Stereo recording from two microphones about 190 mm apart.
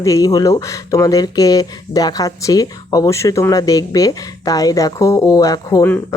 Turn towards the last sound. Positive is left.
turn(degrees=15)  # may be behind; listen again after turning